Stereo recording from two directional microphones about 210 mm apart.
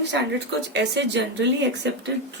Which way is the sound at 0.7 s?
55° right (ahead or behind).